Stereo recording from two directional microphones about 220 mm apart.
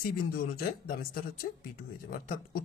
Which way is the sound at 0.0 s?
40° left (ahead or behind).